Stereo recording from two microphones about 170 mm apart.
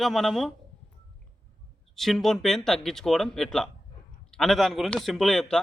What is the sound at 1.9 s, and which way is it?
A man's voice, centre (ahead or behind).